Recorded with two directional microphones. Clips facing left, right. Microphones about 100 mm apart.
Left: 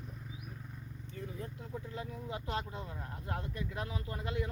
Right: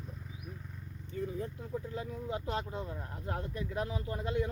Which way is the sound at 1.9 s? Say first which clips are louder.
Right 4 dB; 25° right (ahead or behind).